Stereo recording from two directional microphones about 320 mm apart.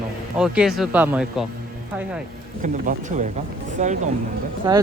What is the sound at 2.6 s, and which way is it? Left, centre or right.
Speech, right.